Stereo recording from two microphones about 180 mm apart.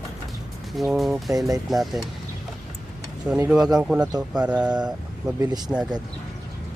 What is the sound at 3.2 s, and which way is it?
Speech, 10° right (ahead or behind).